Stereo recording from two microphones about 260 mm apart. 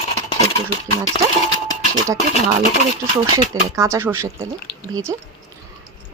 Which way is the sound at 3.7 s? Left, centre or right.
Centre.